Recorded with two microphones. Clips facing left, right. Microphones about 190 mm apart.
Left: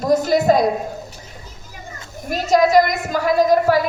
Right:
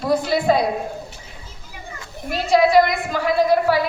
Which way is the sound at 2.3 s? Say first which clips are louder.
Left 1 dB; 45° left (ahead or behind).